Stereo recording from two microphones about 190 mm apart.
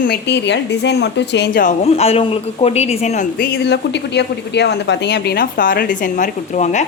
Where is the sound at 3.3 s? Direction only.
55° left (ahead or behind).